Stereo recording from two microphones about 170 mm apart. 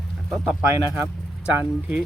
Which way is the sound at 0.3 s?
Centre (ahead or behind).